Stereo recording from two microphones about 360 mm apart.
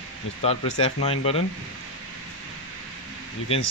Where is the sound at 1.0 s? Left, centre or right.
Centre.